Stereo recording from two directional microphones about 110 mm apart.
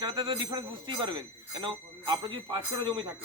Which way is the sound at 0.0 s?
45° right (ahead or behind).